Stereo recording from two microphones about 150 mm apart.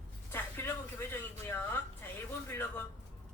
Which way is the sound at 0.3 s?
15° left (ahead or behind).